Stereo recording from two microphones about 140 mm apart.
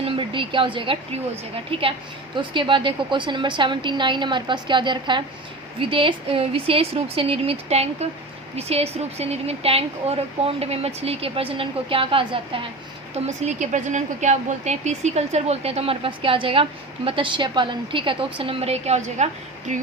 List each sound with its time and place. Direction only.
0.0 s a woman's voice: 35° right (ahead or behind)
13.1 s a woman's voice: 55° right (ahead or behind)